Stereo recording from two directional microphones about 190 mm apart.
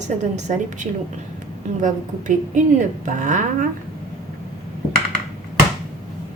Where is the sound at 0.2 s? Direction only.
40° right (ahead or behind).